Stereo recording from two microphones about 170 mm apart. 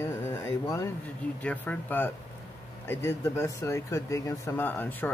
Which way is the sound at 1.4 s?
10° left (ahead or behind).